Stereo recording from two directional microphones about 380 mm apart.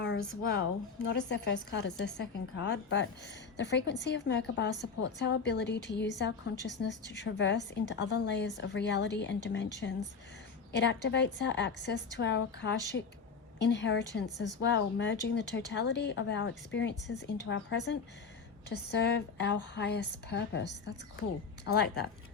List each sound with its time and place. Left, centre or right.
1.0 s a woman's voice: left